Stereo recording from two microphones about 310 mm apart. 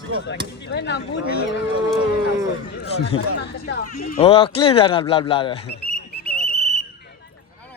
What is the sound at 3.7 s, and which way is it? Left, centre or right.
Speech, left.